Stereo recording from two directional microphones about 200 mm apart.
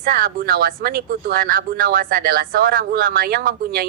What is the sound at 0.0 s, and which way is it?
Speech, 45° right (ahead or behind).